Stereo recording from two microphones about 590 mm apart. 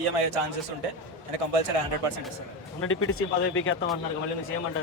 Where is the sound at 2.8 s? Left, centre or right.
Left.